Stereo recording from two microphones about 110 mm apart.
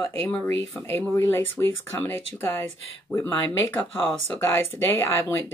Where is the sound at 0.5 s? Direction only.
20° left (ahead or behind).